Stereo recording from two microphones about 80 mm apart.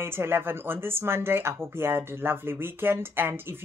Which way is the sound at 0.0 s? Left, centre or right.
Right.